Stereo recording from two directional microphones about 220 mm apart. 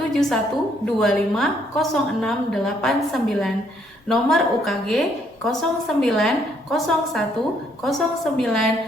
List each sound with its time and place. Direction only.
0.1 s a woman's voice: centre (ahead or behind)